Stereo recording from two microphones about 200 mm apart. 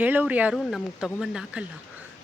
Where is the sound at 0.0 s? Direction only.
10° right (ahead or behind).